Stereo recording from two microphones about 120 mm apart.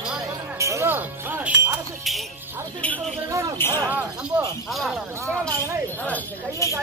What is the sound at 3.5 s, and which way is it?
Speech, 20° left (ahead or behind).